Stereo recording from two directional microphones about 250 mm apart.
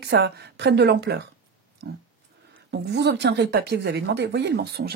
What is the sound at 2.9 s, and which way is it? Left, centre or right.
Speech, right.